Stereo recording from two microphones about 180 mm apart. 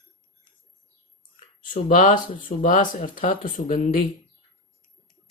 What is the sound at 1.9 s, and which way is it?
Speech, 50° left (ahead or behind).